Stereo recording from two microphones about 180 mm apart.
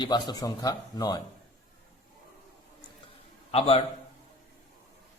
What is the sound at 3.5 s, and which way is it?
Speech, 35° left (ahead or behind).